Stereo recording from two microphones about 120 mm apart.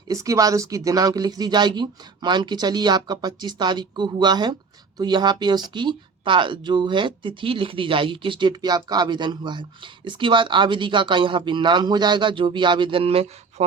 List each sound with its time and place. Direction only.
0.1 s a woman's voice: 30° right (ahead or behind); by 13.7 s 60° right (ahead or behind)